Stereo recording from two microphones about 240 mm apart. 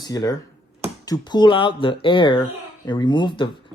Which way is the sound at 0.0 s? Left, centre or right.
Centre.